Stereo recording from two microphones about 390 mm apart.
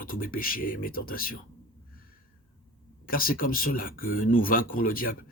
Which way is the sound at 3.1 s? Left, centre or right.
Left.